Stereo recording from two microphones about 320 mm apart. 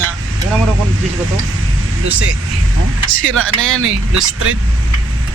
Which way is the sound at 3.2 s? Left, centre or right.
Right.